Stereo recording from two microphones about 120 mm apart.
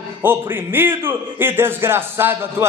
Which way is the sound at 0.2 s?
20° right (ahead or behind).